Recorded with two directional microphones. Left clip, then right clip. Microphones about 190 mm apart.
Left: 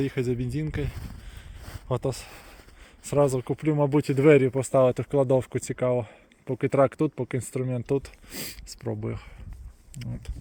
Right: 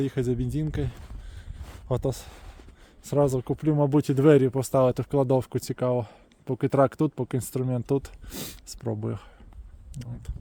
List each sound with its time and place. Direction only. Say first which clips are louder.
0.2 s speech: even; 25° right (ahead or behind)
3.2 s speech: left 1 dB; 20° right (ahead or behind)